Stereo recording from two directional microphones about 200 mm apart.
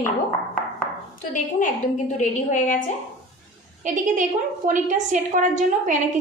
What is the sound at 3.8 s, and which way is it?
A woman's voice, 40° right (ahead or behind).